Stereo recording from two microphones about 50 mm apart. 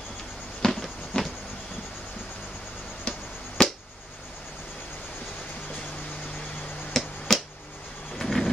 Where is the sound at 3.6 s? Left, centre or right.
Centre.